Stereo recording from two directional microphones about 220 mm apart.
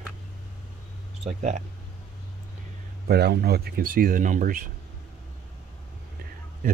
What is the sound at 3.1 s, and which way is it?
Speech, 45° right (ahead or behind).